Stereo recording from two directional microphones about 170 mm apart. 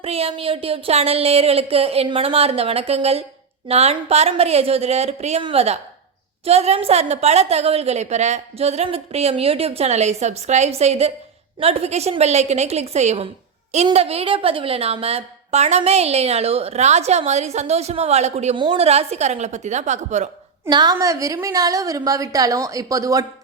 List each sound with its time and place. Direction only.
0.0 s a woman's voice: 35° right (ahead or behind)
18.5 s a woman's voice: 30° right (ahead or behind)
20.7 s a woman's voice: 25° right (ahead or behind)